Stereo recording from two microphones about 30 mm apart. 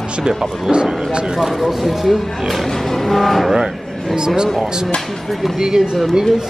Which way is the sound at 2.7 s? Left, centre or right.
Centre.